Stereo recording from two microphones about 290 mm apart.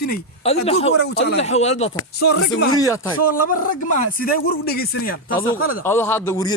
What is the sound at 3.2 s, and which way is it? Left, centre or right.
Speech, left.